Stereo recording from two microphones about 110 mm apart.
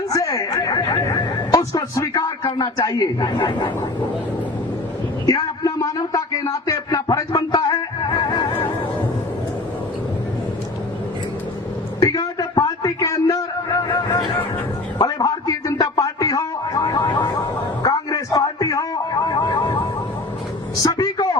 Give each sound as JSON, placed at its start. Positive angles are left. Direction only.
{"t": 0.1, "sound": "chuckle", "side_deg": 35}
{"t": 2.6, "sound": "a man's voice", "side_deg": 35}
{"t": 5.2, "sound": "music", "side_deg": 35}
{"t": 6.5, "sound": "a man's voice", "side_deg": 35}
{"t": 7.6, "sound": "music", "side_deg": 30}
{"t": 11.9, "sound": "a sound", "side_deg": 35}
{"t": 20.8, "sound": "a sound", "side_deg": 35}